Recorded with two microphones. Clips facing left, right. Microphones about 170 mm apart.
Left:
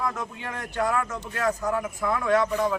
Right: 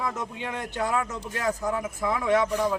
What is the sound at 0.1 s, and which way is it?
A man's voice, 20° right (ahead or behind).